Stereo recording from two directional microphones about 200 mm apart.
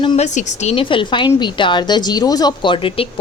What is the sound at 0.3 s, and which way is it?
A woman's voice, 35° left (ahead or behind).